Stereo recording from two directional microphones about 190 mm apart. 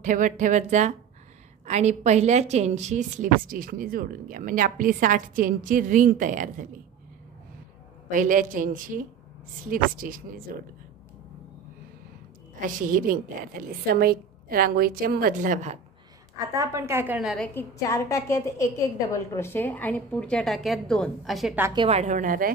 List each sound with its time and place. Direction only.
0.0 s a woman's voice: 40° right (ahead or behind)
8.1 s a woman's voice: 45° right (ahead or behind)
12.5 s a woman's voice: 45° right (ahead or behind)
16.3 s a woman's voice: 15° right (ahead or behind); by 17.5 s centre (ahead or behind)
17.6 s a woman's voice: 15° left (ahead or behind); by 21.5 s centre (ahead or behind)
21.7 s a woman's voice: 30° right (ahead or behind)